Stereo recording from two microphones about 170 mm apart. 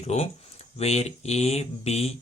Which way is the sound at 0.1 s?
40° left (ahead or behind).